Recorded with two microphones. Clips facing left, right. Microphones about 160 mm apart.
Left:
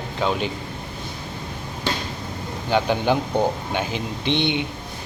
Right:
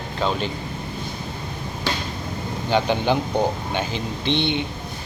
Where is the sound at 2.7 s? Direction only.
5° left (ahead or behind).